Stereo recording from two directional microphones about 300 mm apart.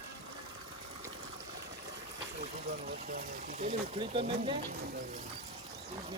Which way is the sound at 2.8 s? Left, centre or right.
Right.